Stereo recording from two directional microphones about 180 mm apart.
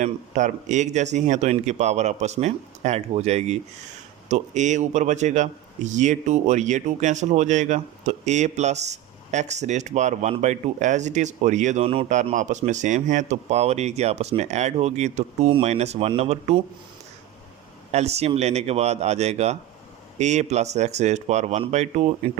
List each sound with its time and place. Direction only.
0.0 s a man's voice: 45° right (ahead or behind)
17.9 s a man's voice: 35° right (ahead or behind)